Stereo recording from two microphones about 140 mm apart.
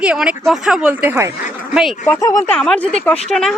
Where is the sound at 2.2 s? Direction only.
25° left (ahead or behind).